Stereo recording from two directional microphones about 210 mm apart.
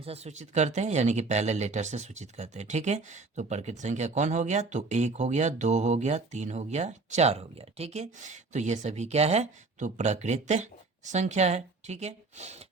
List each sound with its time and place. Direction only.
0.0 s speech: 30° right (ahead or behind)